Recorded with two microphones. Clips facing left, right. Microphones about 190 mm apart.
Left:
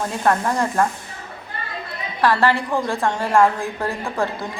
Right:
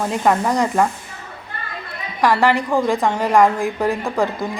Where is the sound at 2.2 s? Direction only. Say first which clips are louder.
Right 2 dB; 15° right (ahead or behind).